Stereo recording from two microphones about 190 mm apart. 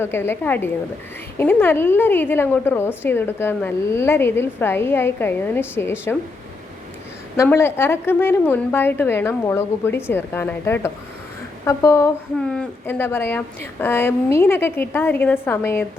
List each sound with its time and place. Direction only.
0.0 s a woman's voice: 10° left (ahead or behind)
7.3 s a woman's voice: 15° left (ahead or behind)